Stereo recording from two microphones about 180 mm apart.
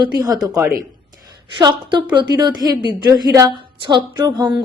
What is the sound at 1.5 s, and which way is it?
A woman's voice, 25° right (ahead or behind).